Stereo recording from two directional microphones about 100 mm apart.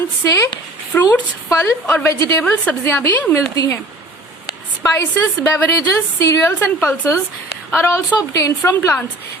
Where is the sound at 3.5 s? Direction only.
35° left (ahead or behind).